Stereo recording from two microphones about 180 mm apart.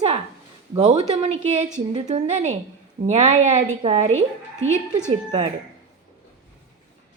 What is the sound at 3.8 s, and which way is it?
Speech, 40° right (ahead or behind).